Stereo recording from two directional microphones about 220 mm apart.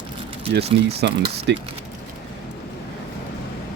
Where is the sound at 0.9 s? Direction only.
50° right (ahead or behind).